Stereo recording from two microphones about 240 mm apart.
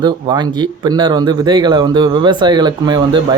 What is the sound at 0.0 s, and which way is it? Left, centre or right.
Speech, centre.